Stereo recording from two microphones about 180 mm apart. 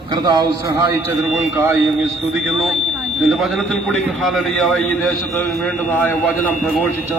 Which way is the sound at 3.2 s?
Centre (ahead or behind).